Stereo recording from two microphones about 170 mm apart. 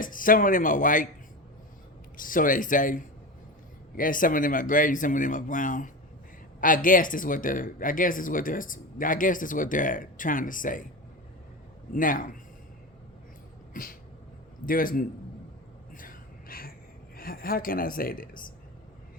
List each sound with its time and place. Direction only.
0.0 s speech: 55° left (ahead or behind)
2.1 s speech: 55° left (ahead or behind)
11.9 s speech: 55° left (ahead or behind)
14.7 s a woman's voice: 55° left (ahead or behind)
16.0 s a sound: 55° left (ahead or behind)
17.2 s a woman's voice: 60° left (ahead or behind)